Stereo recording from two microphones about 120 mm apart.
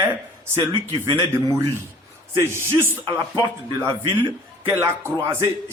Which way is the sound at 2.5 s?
20° right (ahead or behind).